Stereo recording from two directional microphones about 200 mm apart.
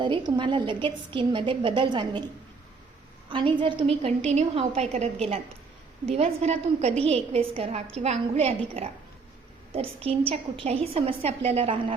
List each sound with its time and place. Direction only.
0.0 s a woman's voice: 25° right (ahead or behind)
6.1 s a woman's voice: 30° right (ahead or behind)